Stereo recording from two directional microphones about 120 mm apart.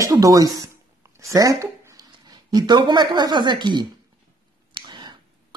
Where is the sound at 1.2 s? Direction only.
25° right (ahead or behind).